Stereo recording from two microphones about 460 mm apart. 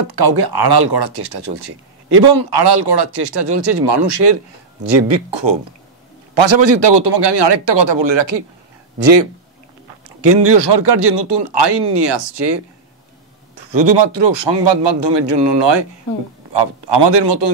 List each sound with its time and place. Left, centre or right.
0.1 s speech: right